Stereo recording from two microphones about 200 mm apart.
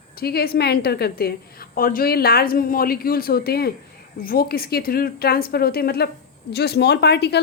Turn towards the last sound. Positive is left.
turn(degrees=55)  # may be behind; listen again after turning